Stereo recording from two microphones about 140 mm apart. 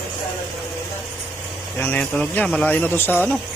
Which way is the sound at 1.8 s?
10° left (ahead or behind).